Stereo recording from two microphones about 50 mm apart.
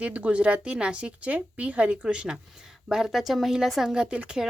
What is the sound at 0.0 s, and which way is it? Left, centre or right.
A woman's voice, right.